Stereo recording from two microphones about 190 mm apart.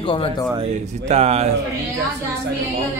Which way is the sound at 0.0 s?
25° left (ahead or behind).